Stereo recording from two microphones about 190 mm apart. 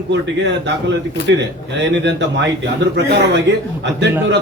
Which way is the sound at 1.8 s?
70° right (ahead or behind).